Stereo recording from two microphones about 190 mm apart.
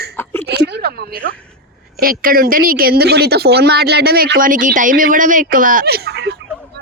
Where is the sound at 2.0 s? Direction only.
50° right (ahead or behind).